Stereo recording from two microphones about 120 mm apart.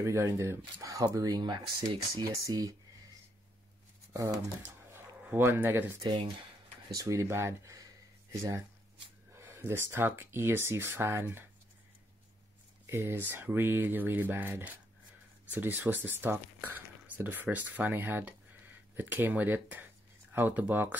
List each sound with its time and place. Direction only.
0.0 s speech: 25° right (ahead or behind)
2.2 s speech: 25° right (ahead or behind)
4.1 s speech: 25° right (ahead or behind)
12.8 s speech: 20° right (ahead or behind)